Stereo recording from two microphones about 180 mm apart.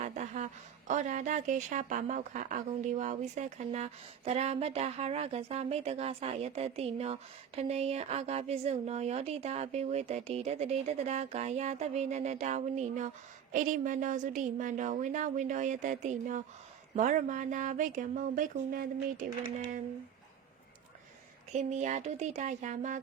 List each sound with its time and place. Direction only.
0.0 s a sound: 40° right (ahead or behind)
0.9 s a woman's voice: 45° right (ahead or behind)
21.5 s speech: 40° right (ahead or behind)